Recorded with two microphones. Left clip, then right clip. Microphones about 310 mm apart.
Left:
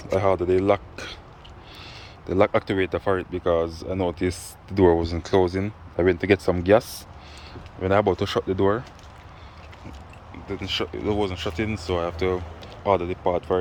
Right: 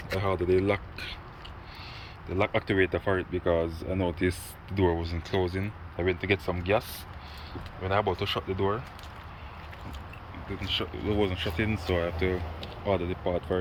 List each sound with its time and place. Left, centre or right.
0.1 s speech: centre
2.4 s speech: centre
10.6 s speech: centre